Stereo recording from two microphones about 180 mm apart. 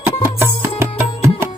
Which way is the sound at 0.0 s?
10° right (ahead or behind).